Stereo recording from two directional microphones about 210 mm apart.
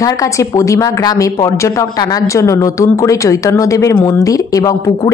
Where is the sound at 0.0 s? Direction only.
15° left (ahead or behind).